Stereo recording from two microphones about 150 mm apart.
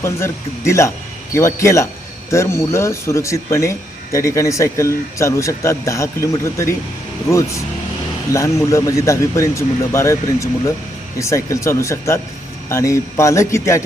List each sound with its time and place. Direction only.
0.0 s speech: 20° left (ahead or behind)